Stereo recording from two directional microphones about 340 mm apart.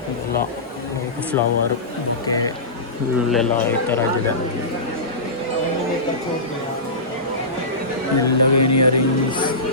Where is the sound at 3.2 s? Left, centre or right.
Centre.